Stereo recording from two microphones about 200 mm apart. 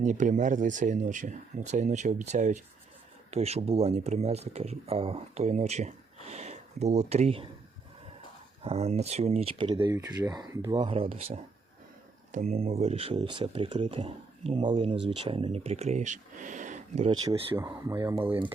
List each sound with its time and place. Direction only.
0.0 s speech: 40° right (ahead or behind)
8.6 s speech: 30° right (ahead or behind)
17.1 s speech: 25° right (ahead or behind)